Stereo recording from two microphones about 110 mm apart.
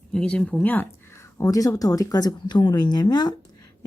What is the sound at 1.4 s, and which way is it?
Speech, 30° left (ahead or behind).